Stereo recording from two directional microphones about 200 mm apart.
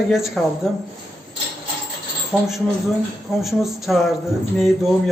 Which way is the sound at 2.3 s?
Centre (ahead or behind).